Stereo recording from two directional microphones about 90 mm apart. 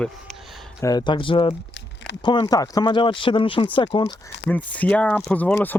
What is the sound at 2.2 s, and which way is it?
Speech, 55° left (ahead or behind).